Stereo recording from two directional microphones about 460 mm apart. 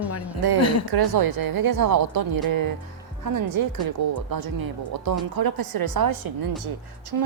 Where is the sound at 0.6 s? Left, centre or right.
Left.